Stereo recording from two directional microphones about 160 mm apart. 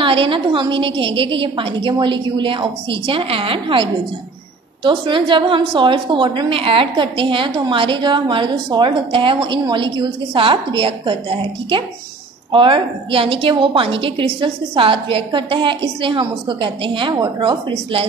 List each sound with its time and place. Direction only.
0.0 s a woman's voice: 35° right (ahead or behind)